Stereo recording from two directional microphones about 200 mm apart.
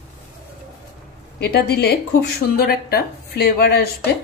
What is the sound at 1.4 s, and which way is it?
Speech, 55° left (ahead or behind).